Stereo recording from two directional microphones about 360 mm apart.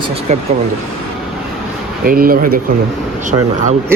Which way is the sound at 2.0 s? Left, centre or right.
Right.